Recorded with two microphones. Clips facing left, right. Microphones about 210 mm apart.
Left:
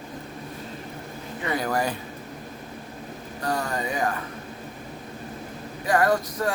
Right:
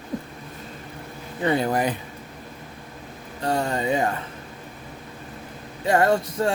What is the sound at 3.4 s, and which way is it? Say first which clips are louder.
Vehicle: right 4 dB; 25° right (ahead or behind).